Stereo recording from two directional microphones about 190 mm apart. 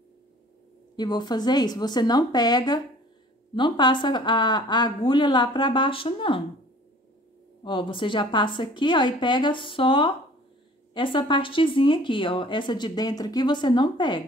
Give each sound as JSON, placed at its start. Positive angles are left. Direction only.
{"t": 0.9, "sound": "speech", "side_deg": 20}
{"t": 7.6, "sound": "speech", "side_deg": 25}